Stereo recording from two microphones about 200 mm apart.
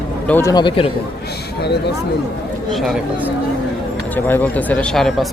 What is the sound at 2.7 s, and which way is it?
Speech, centre (ahead or behind).